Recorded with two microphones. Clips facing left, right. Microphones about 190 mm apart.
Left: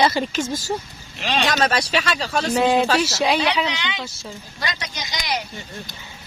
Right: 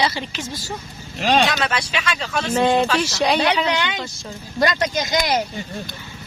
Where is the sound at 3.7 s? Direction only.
45° right (ahead or behind).